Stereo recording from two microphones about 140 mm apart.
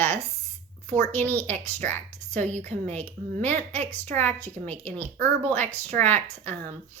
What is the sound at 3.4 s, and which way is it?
Speech, 10° left (ahead or behind).